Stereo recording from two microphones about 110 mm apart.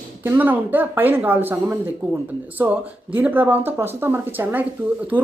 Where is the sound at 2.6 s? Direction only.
25° right (ahead or behind).